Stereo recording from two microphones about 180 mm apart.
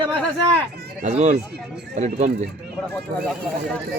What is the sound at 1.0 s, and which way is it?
Speech, 35° right (ahead or behind).